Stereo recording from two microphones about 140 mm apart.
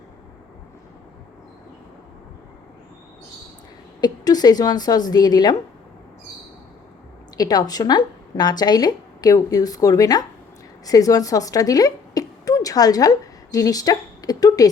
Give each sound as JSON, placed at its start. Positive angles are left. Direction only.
{"t": 4.0, "sound": "speech", "side_deg": 30}
{"t": 7.3, "sound": "a woman's voice", "side_deg": 30}